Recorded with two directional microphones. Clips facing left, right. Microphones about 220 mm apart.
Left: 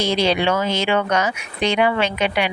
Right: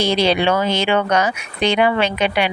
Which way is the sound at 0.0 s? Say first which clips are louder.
Right 2 dB; 30° right (ahead or behind).